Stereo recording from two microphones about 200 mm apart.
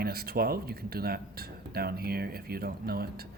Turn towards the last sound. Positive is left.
turn(degrees=-50)  # may be behind; listen again after turning